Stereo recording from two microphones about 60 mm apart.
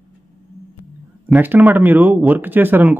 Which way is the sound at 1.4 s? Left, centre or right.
Right.